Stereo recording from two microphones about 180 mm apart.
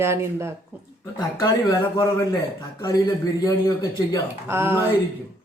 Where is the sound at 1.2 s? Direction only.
20° left (ahead or behind).